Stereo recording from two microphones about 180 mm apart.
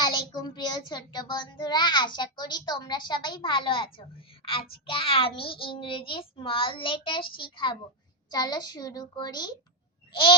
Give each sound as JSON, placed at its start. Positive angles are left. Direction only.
{"t": 0.0, "sound": "a child's voice", "side_deg": 25}
{"t": 10.1, "sound": "goat", "side_deg": 25}